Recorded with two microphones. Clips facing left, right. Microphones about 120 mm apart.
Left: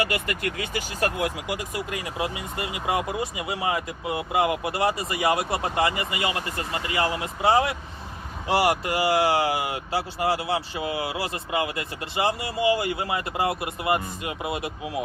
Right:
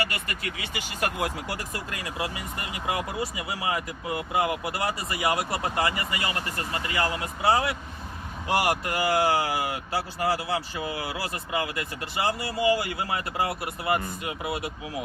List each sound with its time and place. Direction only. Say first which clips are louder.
0.3 s speech: left 6 dB; 50° left (ahead or behind)
1.5 s speech: left 4 dB; 15° left (ahead or behind)